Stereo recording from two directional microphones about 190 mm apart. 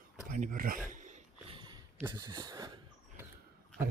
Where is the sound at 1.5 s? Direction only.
25° right (ahead or behind).